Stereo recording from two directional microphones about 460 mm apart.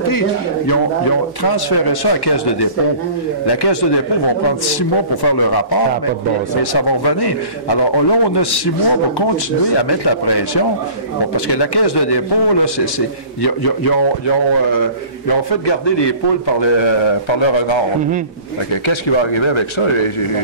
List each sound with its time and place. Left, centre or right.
1.4 s a man's voice: left
15.2 s a man's voice: left